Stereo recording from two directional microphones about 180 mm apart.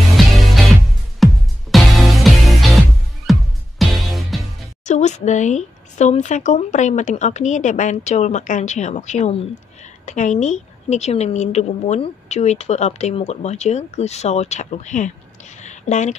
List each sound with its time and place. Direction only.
0.1 s music: centre (ahead or behind)
4.8 s a woman's voice: 40° left (ahead or behind)
15.6 s a sound: 40° left (ahead or behind)